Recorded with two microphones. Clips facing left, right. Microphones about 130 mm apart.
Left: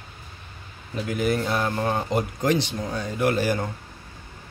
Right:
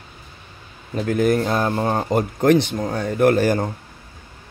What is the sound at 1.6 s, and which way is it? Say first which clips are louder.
Speech: right 4 dB; 30° right (ahead or behind).